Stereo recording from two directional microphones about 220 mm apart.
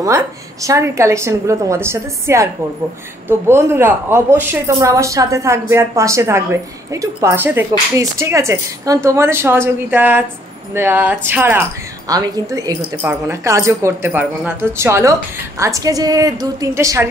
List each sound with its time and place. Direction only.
0.0 s a woman's voice: 15° right (ahead or behind)